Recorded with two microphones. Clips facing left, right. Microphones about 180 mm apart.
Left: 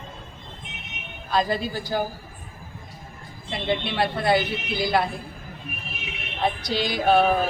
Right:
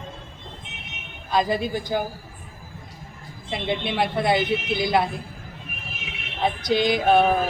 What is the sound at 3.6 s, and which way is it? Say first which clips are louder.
A woman's voice: even; 20° right (ahead or behind).